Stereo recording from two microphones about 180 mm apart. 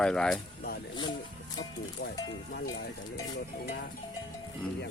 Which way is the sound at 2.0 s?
75° left (ahead or behind).